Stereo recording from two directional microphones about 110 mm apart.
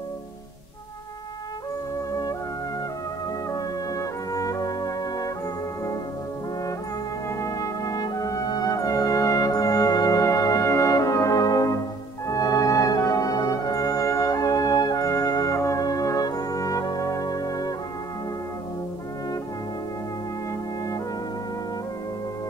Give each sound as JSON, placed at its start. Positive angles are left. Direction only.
{"t": 3.5, "sound": "brass instrument", "side_deg": 30}
{"t": 7.2, "sound": "music", "side_deg": 30}
{"t": 12.3, "sound": "brass instrument", "side_deg": 35}